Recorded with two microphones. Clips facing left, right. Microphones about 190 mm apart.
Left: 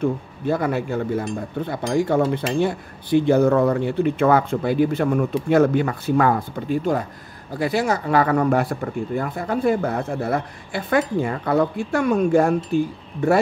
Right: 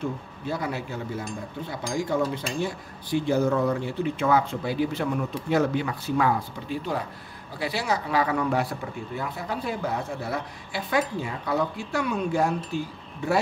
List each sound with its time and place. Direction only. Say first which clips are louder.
0.0 s speech: left 8 dB; 55° left (ahead or behind)